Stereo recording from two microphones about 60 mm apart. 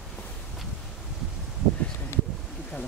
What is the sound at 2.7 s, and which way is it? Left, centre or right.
Speech, left.